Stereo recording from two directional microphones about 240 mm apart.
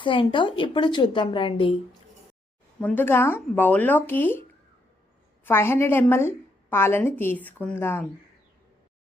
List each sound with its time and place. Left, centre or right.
0.0 s a woman's voice: left
2.8 s a woman's voice: centre
5.5 s a woman's voice: centre